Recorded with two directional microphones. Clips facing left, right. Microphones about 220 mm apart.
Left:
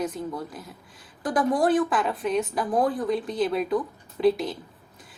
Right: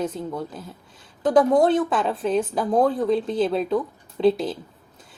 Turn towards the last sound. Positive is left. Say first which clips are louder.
# right 2 dB
turn(degrees=-25)  # may be behind; listen again after turning